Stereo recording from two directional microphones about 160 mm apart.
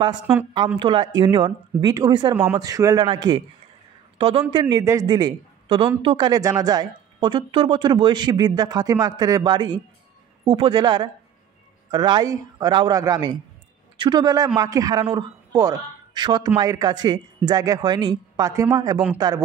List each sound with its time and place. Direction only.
0.7 s speech: 30° right (ahead or behind)